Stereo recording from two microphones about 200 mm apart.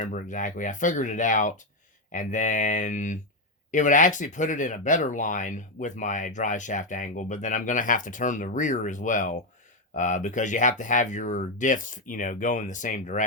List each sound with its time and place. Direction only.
0.0 s speech: 40° left (ahead or behind)